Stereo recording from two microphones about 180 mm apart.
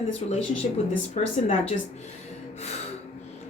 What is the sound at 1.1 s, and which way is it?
Speech, 35° left (ahead or behind).